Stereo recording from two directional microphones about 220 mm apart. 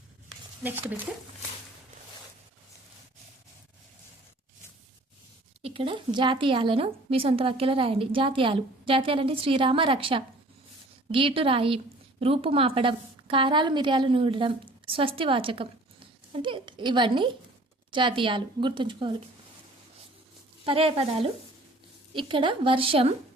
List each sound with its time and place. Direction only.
0.6 s speech: 10° right (ahead or behind)
5.6 s a woman's voice: 25° right (ahead or behind)
20.7 s a woman's voice: 25° right (ahead or behind)